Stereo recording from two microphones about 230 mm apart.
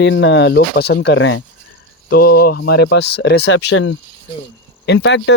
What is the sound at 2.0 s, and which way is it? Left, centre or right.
Speech, left.